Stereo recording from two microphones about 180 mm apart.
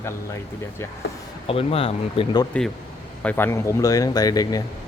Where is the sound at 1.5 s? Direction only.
30° left (ahead or behind).